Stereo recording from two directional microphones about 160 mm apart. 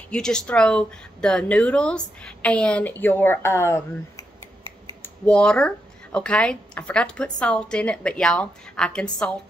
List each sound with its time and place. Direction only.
0.1 s a woman's voice: 5° left (ahead or behind)
5.0 s a woman's voice: 5° left (ahead or behind)